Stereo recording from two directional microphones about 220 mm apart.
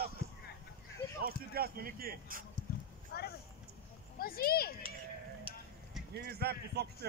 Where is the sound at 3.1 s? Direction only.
45° left (ahead or behind).